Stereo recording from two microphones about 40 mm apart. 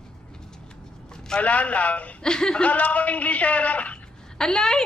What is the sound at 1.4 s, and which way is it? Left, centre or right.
Speech, left.